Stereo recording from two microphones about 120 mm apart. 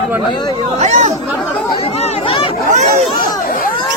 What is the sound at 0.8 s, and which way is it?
Speech, 75° right (ahead or behind).